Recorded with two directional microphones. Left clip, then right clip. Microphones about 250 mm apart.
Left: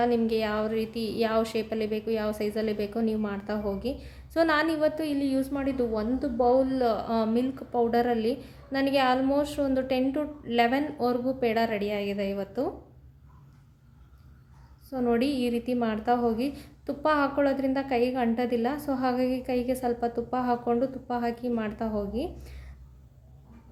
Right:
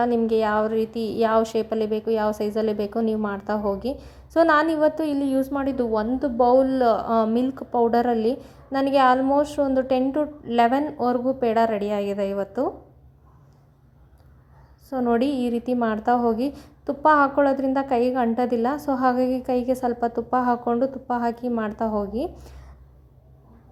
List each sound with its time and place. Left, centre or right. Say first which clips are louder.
0.0 s a woman's voice: right 5 dB; centre
14.8 s a woman's voice: right 4 dB; centre